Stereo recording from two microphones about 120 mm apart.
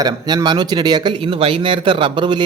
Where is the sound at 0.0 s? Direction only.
35° right (ahead or behind).